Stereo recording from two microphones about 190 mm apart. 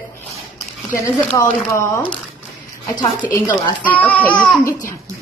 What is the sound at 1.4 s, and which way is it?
A woman's voice, 15° left (ahead or behind).